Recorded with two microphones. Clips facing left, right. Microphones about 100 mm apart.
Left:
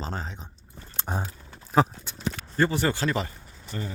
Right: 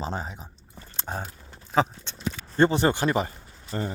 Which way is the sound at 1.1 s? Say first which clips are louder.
Left 1 dB; centre (ahead or behind).